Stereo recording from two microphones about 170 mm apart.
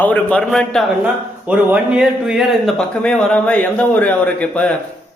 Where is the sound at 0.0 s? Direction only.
10° left (ahead or behind).